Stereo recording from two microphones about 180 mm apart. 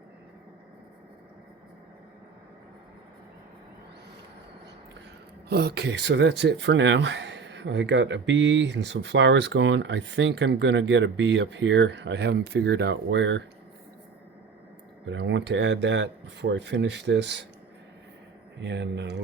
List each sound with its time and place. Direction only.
5.5 s speech: 65° right (ahead or behind); by 13.4 s 85° right
15.0 s speech: 85° right
18.6 s speech: 80° right